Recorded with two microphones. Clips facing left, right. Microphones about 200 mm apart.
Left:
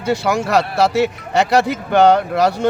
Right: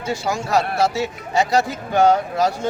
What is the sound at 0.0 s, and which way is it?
Speech, 65° left (ahead or behind).